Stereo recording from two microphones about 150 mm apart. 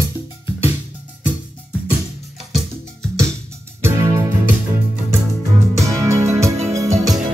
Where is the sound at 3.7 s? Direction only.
15° right (ahead or behind).